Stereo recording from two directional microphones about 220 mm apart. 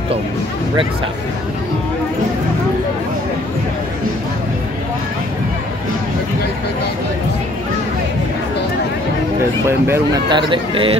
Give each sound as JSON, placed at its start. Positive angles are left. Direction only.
{"t": 9.7, "sound": "speech", "side_deg": -10}